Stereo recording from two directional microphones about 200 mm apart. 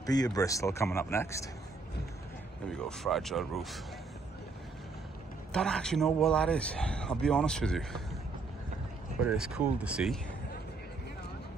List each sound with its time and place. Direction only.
0.0 s speech: 20° left (ahead or behind)
2.7 s a man's voice: centre (ahead or behind)
5.5 s a man's voice: 5° left (ahead or behind)
9.2 s a man's voice: 5° right (ahead or behind)